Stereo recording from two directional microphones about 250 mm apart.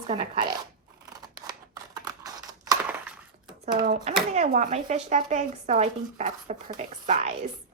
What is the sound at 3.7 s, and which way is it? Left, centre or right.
A child's voice, right.